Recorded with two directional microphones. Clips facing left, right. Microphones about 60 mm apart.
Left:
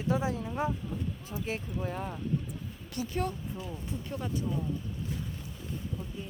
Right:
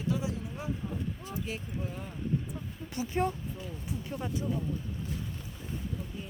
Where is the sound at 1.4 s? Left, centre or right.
Left.